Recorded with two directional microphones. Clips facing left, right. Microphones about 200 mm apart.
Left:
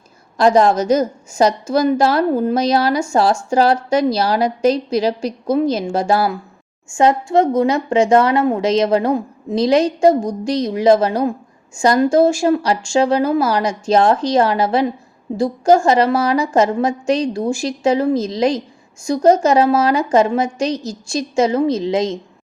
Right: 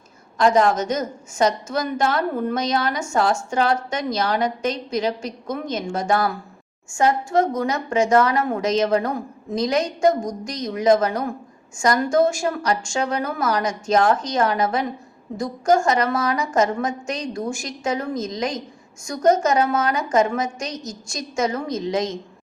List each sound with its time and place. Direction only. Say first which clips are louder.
0.3 s a woman's voice: left 4 dB; 35° left (ahead or behind)